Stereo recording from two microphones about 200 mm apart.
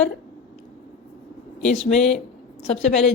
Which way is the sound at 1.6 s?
5° left (ahead or behind).